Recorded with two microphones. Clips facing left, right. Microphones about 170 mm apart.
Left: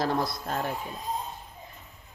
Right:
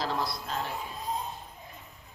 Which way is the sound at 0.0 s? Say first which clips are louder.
Left 4 dB; 50° left (ahead or behind).